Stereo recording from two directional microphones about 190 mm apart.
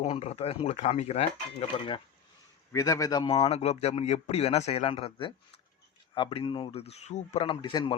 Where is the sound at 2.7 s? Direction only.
15° left (ahead or behind).